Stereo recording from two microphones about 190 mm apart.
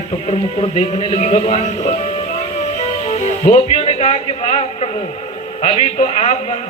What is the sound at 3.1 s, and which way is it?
A man's voice, 35° left (ahead or behind).